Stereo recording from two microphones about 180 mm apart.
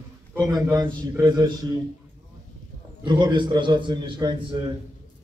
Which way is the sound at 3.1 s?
25° right (ahead or behind).